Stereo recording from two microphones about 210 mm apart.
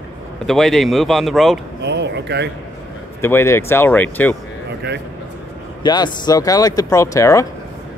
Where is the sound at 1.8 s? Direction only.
55° right (ahead or behind).